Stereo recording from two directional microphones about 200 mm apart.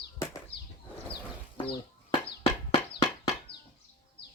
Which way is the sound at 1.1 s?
25° left (ahead or behind).